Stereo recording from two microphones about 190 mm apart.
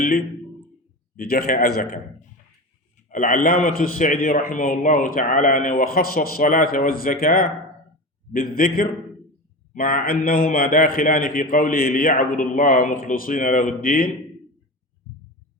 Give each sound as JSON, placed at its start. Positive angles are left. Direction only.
{"t": 1.1, "sound": "a man's voice", "side_deg": 50}
{"t": 3.1, "sound": "a man's voice", "side_deg": 40}